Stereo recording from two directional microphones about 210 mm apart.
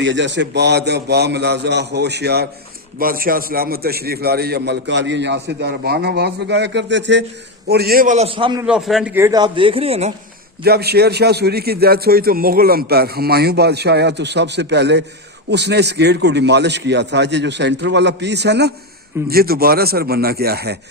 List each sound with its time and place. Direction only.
0.0 s a man's voice: 60° right (ahead or behind); by 8.6 s 25° right (ahead or behind)
8.6 s a man's voice: centre (ahead or behind); by 10.1 s 30° right (ahead or behind)
10.6 s a man's voice: 50° right (ahead or behind)